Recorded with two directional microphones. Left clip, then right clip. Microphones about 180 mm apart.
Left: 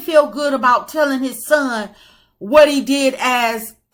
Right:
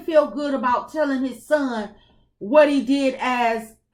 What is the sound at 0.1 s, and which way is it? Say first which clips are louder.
A woman's voice: left 5 dB; 20° left (ahead or behind).